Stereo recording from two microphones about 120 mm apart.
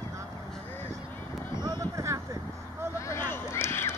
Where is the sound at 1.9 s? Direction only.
25° right (ahead or behind).